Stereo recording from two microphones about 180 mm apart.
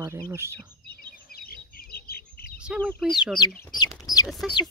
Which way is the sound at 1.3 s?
55° left (ahead or behind).